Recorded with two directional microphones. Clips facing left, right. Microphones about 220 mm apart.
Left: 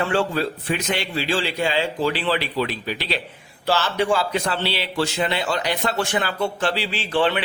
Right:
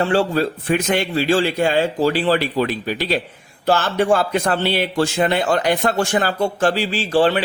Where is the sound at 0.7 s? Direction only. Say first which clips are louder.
Right 6 dB; 50° right (ahead or behind).